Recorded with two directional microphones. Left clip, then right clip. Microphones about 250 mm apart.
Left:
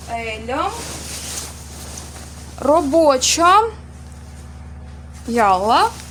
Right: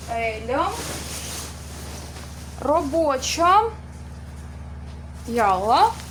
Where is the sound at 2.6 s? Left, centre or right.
Left.